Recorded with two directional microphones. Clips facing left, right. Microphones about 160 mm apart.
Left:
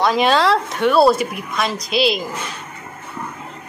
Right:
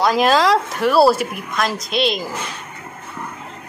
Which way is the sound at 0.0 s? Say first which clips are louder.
Right 1 dB; 5° right (ahead or behind).